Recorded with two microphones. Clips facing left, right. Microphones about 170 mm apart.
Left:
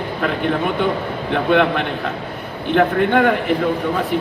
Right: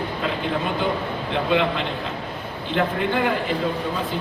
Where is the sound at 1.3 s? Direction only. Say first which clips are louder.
Left 6 dB; 65° left (ahead or behind).